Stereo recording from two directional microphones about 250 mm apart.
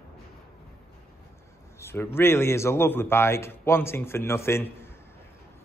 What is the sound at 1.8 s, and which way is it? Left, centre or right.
Speech, centre.